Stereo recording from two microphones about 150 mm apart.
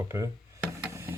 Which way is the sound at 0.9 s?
15° right (ahead or behind).